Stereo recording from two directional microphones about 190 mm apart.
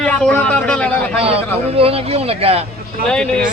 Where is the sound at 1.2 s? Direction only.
30° right (ahead or behind).